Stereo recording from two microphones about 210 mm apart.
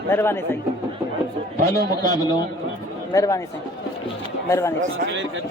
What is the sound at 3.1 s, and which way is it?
Speech, 15° left (ahead or behind).